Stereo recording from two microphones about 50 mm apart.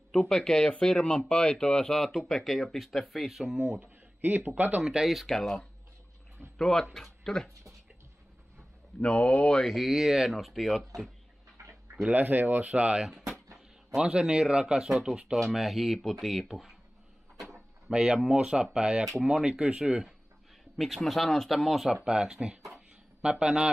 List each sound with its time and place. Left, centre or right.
0.1 s speech: centre
3.8 s a sound: right
4.6 s speech: right
4.8 s speech: centre
6.6 s speech: centre
9.0 s speech: left
9.7 s speech: centre
11.6 s dog: right
12.1 s speech: right; by 16.7 s centre
17.8 s speech: centre
18.6 s speech: centre
20.7 s speech: centre
22.0 s speech: centre